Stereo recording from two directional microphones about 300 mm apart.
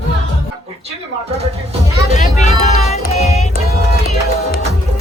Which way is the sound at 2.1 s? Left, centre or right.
Left.